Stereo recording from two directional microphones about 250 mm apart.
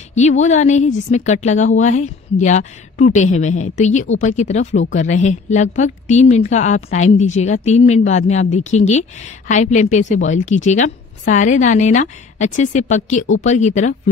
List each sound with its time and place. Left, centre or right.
0.1 s speech: left